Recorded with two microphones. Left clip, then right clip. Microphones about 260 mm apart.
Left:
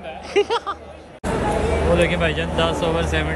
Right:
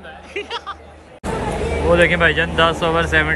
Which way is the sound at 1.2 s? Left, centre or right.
Centre.